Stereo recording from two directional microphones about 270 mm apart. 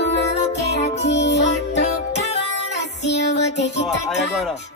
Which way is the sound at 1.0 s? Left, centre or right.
Left.